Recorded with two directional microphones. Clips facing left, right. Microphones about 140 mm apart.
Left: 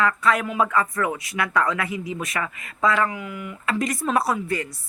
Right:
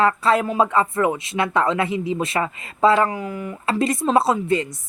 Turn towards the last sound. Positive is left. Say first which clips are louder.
# right 5 dB
turn(degrees=-25)  # may be behind; listen again after turning